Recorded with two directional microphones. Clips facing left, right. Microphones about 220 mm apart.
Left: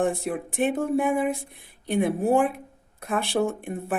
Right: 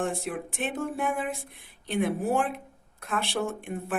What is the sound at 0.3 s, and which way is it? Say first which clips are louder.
Speech: left 7 dB; 55° left (ahead or behind).